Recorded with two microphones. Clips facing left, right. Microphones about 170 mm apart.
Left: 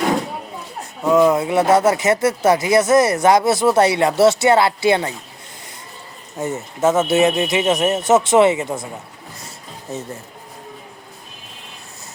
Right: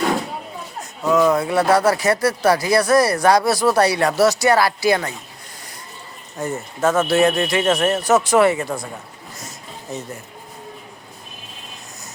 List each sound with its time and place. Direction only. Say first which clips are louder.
1.0 s speech: left 2 dB; 25° left (ahead or behind)
6.4 s speech: left 2 dB; 20° left (ahead or behind)